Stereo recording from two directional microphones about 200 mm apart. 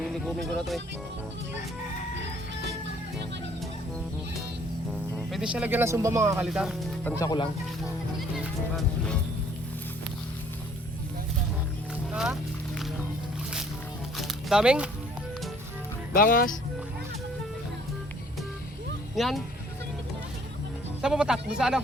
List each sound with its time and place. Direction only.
0.0 s speech: centre (ahead or behind)
5.3 s speech: 5° right (ahead or behind)
6.4 s speech: 5° right (ahead or behind)
7.2 s speech: 20° left (ahead or behind)
12.1 s speech: 5° right (ahead or behind)
14.2 s music: 5° right (ahead or behind)
16.1 s speech: 45° left (ahead or behind)
19.1 s speech: centre (ahead or behind)
21.0 s speech: 5° right (ahead or behind)